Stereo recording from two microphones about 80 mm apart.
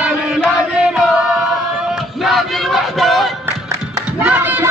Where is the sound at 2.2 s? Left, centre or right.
Centre.